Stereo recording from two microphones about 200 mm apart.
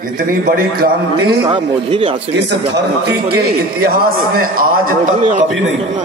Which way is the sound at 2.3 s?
60° right (ahead or behind).